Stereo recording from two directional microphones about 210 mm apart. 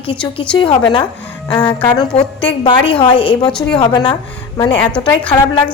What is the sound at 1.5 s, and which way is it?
A woman's voice, 10° left (ahead or behind).